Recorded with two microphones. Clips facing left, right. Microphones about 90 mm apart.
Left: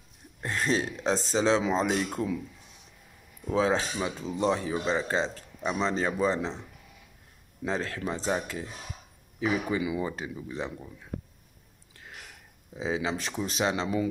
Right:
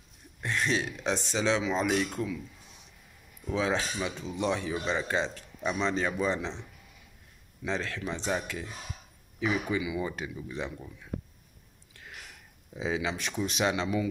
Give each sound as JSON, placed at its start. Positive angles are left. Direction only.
{"t": 0.4, "sound": "speech", "side_deg": 35}
{"t": 3.5, "sound": "speech", "side_deg": 35}
{"t": 7.6, "sound": "speech", "side_deg": 40}
{"t": 12.7, "sound": "speech", "side_deg": 30}